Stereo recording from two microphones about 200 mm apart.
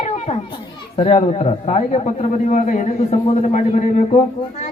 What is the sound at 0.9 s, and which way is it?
A man's voice, 35° left (ahead or behind).